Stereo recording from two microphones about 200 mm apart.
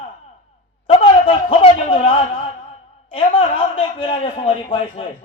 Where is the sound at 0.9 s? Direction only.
25° left (ahead or behind).